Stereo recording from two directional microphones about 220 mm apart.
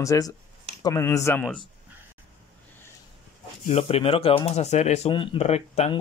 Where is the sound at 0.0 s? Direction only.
15° left (ahead or behind).